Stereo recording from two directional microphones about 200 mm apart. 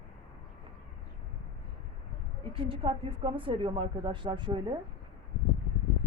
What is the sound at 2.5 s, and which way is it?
A woman's voice, 25° right (ahead or behind).